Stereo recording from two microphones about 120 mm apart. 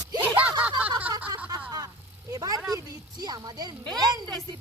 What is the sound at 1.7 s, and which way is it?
Vehicle, 30° right (ahead or behind).